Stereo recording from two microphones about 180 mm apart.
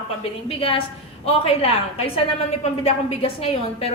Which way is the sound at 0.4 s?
30° left (ahead or behind).